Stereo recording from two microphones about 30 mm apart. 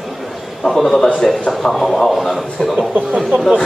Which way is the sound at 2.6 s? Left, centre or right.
Left.